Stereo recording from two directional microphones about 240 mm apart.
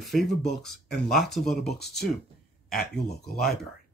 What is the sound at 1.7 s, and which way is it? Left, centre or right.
Speech, left.